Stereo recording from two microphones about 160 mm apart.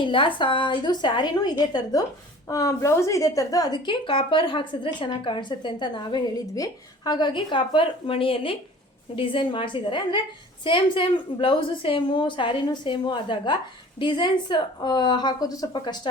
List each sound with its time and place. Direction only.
0.0 s a woman's voice: 30° left (ahead or behind)